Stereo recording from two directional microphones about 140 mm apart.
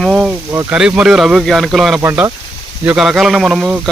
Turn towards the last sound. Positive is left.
turn(degrees=-10)  # may be behind; listen again after turning